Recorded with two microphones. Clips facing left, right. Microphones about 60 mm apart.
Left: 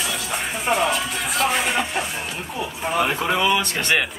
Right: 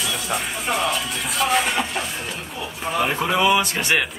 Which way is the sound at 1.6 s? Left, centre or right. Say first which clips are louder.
Right 1 dB; centre.